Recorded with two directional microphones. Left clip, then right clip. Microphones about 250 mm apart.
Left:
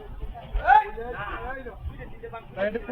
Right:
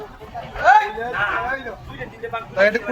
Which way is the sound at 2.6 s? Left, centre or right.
Right.